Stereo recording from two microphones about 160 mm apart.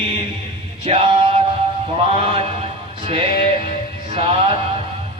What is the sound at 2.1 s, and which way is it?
Music, 35° right (ahead or behind).